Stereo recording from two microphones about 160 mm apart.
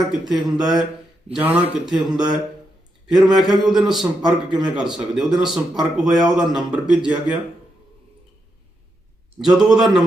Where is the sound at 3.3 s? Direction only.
5° right (ahead or behind).